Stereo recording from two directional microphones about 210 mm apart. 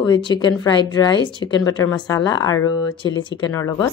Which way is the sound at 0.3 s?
20° left (ahead or behind).